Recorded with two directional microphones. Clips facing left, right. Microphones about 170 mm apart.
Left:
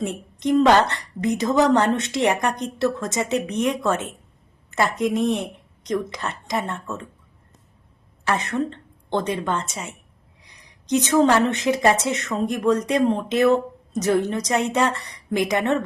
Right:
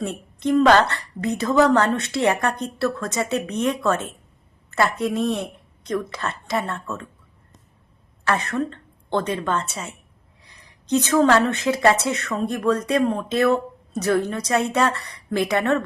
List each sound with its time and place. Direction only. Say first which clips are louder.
0.0 s a woman's voice: even; 15° left (ahead or behind)
8.2 s a woman's voice: even; 15° left (ahead or behind)